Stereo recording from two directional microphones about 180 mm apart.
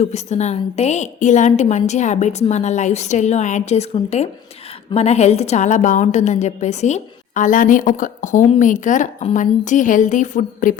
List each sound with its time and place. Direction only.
0.0 s a woman's voice: 40° left (ahead or behind)